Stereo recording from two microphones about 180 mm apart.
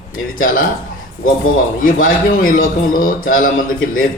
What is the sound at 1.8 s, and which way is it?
A man's voice, 50° left (ahead or behind).